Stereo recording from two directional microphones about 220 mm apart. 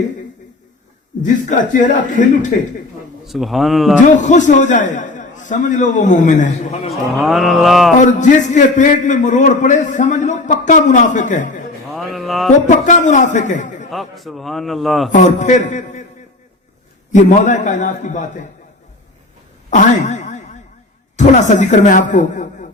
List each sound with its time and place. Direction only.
1.2 s a man's voice: 35° left (ahead or behind)
3.2 s a man's voice: centre (ahead or behind)
4.0 s a man's voice: 35° left (ahead or behind)
6.9 s a man's voice: centre (ahead or behind)
7.9 s a man's voice: 35° left (ahead or behind)
11.9 s music: centre (ahead or behind)
12.6 s a man's voice: 35° left (ahead or behind)
13.9 s a man's voice: centre (ahead or behind)
15.1 s a man's voice: 35° left (ahead or behind)
17.1 s a man's voice: 35° left (ahead or behind)
19.7 s a sound: 35° left (ahead or behind)
21.2 s a man's voice: 35° left (ahead or behind)